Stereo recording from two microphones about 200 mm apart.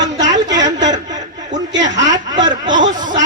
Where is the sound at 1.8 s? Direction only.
65° right (ahead or behind).